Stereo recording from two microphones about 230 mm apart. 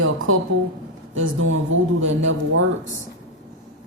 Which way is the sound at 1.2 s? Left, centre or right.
Right.